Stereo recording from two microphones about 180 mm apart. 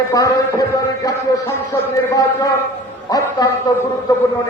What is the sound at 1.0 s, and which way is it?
A man's voice, 15° left (ahead or behind).